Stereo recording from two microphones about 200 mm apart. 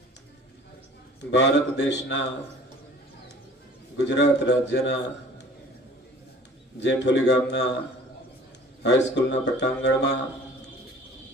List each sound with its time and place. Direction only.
1.3 s a man's voice: 60° left (ahead or behind)
4.0 s a man's voice: 60° left (ahead or behind)
6.8 s a man's voice: 60° left (ahead or behind)
8.8 s a man's voice: 60° left (ahead or behind)